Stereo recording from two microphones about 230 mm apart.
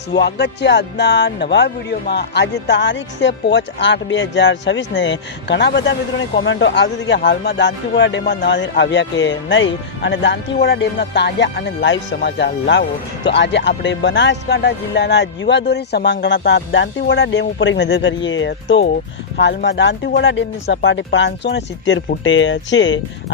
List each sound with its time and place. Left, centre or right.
0.1 s speech: left